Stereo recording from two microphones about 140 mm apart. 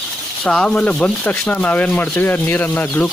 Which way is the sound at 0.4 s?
5° left (ahead or behind).